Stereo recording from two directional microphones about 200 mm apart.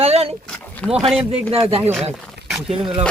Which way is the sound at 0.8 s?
10° left (ahead or behind).